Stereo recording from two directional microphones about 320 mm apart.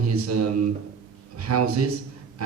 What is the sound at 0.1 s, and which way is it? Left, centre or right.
A man's voice, right.